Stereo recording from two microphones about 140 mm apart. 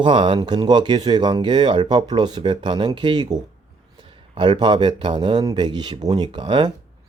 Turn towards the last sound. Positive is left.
turn(degrees=-30)  # may be behind; listen again after turning